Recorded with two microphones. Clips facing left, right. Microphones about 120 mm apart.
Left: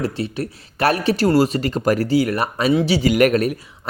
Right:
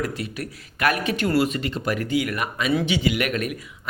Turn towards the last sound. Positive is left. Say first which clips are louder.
# left 10 dB
turn(degrees=35)  # may be behind; listen again after turning